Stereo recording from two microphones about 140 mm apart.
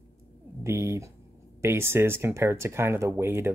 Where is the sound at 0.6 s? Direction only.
20° right (ahead or behind).